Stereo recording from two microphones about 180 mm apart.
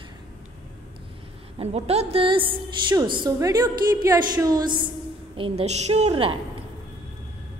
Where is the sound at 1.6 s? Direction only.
35° right (ahead or behind).